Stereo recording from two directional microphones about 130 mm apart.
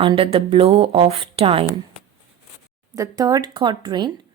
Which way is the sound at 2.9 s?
25° right (ahead or behind).